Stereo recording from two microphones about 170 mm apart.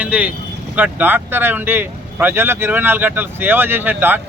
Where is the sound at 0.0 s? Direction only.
10° right (ahead or behind).